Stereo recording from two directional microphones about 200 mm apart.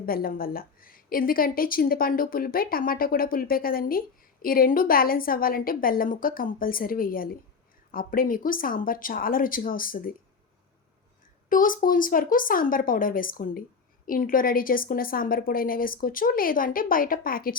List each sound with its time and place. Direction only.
0.0 s a woman's voice: 45° left (ahead or behind)
11.4 s a woman's voice: 45° left (ahead or behind)